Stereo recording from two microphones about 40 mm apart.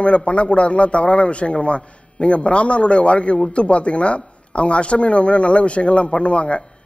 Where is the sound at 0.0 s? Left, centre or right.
Left.